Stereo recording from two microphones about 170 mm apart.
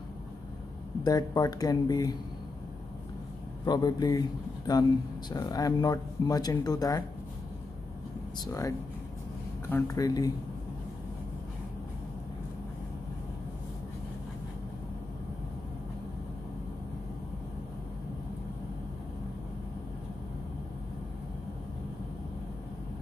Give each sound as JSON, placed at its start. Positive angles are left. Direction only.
{"t": 1.0, "sound": "a man's voice", "side_deg": 20}
{"t": 3.6, "sound": "a man's voice", "side_deg": 25}
{"t": 8.5, "sound": "a man's voice", "side_deg": 15}